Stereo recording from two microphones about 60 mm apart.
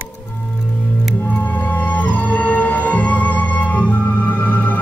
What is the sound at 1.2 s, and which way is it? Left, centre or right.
Music, left.